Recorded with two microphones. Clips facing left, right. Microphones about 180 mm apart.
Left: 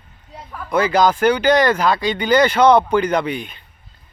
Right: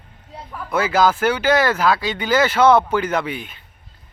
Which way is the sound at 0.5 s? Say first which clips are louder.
Left 2 dB; 5° right (ahead or behind).